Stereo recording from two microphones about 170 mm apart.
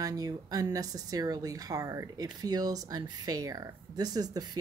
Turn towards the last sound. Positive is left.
turn(degrees=-20)  # may be behind; listen again after turning